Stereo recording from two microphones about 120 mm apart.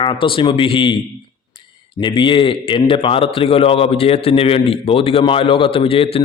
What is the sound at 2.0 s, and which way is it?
A man's voice, 40° left (ahead or behind).